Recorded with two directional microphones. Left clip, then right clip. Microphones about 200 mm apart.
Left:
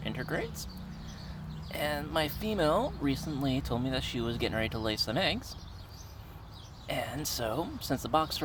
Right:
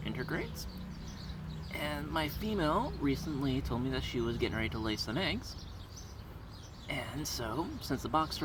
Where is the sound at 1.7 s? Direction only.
30° left (ahead or behind).